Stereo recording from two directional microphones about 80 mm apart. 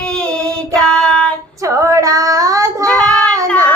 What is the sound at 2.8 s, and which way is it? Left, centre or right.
Child singing, centre.